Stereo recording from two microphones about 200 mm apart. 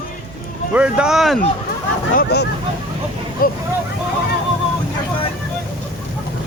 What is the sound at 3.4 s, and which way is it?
Vehicle, 45° left (ahead or behind).